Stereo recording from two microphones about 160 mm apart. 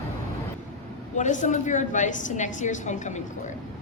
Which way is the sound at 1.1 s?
50° left (ahead or behind).